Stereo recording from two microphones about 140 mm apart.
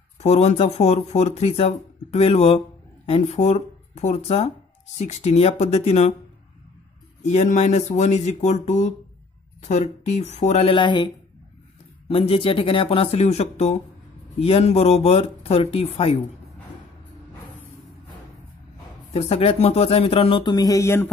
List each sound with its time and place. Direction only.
0.2 s speech: 50° left (ahead or behind)
7.2 s speech: 55° left (ahead or behind)
10.7 s speech: 35° left (ahead or behind)
12.1 s speech: 40° left (ahead or behind)
19.1 s speech: 40° left (ahead or behind); by 21.1 s 20° left (ahead or behind)